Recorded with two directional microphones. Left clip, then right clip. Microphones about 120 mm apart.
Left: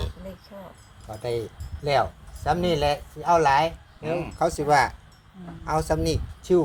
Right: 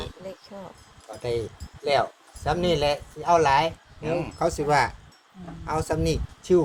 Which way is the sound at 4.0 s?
20° right (ahead or behind).